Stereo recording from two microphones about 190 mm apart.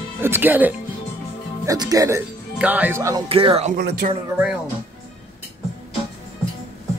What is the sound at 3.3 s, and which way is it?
Speech, 30° right (ahead or behind).